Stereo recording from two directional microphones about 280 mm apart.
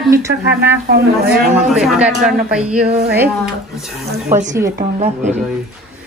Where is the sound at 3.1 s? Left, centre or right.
Centre.